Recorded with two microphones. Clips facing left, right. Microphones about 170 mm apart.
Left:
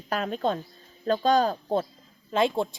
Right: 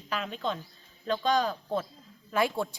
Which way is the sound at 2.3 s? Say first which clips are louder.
Left 4 dB; 25° left (ahead or behind).